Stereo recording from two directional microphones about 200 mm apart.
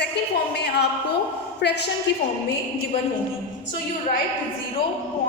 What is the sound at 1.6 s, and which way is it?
Speech, 55° left (ahead or behind).